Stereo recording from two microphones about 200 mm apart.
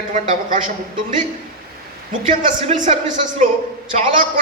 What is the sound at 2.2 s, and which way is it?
Speech, 40° right (ahead or behind).